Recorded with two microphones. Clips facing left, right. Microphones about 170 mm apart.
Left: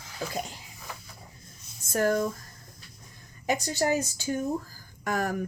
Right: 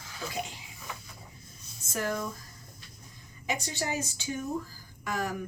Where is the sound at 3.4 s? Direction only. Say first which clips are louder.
Left 7 dB; 45° left (ahead or behind).